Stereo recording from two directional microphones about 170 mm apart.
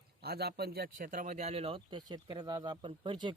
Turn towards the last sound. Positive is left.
turn(degrees=-30)  # may be behind; listen again after turning